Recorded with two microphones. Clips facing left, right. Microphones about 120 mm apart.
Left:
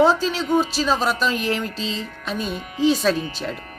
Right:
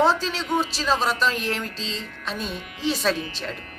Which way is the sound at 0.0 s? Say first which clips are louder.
Left 4 dB; 5° left (ahead or behind).